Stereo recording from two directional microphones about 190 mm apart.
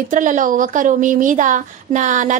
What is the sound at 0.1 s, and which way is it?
A woman's voice, 40° right (ahead or behind).